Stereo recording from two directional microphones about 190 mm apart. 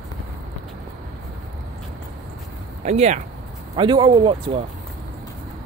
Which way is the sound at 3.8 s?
25° right (ahead or behind).